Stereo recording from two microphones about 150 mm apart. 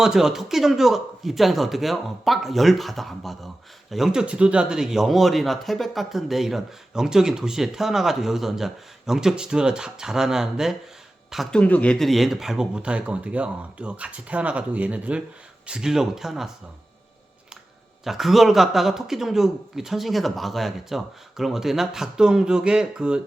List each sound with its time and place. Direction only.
0.0 s speech: 5° right (ahead or behind)
18.0 s speech: centre (ahead or behind)